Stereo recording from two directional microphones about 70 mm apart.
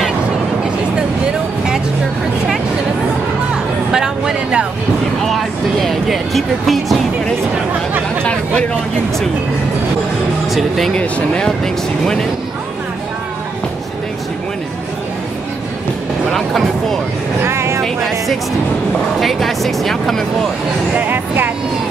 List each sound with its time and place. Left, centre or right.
3.9 s a sound: centre
5.2 s music: centre
8.2 s chatter: centre
11.0 s speech: centre
16.3 s speech: centre
17.4 s vehicle: right
19.1 s speech: centre
21.0 s speech: right